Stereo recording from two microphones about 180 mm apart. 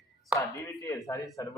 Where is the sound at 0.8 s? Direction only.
15° left (ahead or behind).